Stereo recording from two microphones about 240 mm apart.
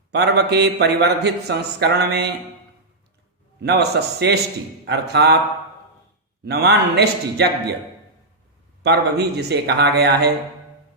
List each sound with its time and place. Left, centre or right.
0.1 s a man's voice: right
3.6 s a man's voice: right
6.4 s a man's voice: right
8.8 s a man's voice: right